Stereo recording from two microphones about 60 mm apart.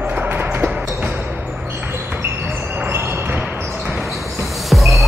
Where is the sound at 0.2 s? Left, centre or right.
Right.